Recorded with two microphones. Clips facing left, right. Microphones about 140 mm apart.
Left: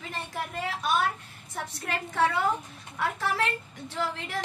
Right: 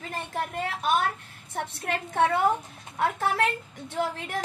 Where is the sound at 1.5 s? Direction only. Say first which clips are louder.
Right 3 dB; 60° right (ahead or behind).